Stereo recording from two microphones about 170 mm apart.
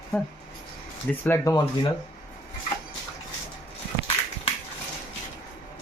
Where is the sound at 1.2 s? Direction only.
15° left (ahead or behind).